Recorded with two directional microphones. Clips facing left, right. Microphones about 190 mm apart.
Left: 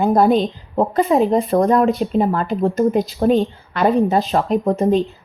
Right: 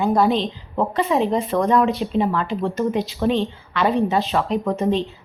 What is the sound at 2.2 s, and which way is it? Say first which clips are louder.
Speech: left 2 dB; 45° left (ahead or behind).